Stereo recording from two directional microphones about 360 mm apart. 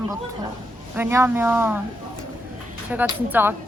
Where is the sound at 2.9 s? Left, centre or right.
Centre.